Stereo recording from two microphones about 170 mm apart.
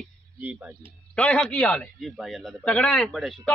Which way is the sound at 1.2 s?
5° left (ahead or behind).